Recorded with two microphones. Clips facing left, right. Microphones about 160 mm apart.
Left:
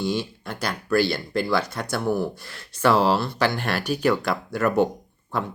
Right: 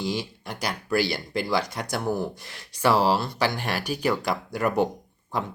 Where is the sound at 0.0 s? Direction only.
15° right (ahead or behind).